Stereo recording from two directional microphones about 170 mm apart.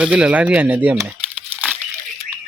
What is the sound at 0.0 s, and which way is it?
Speech, 5° right (ahead or behind).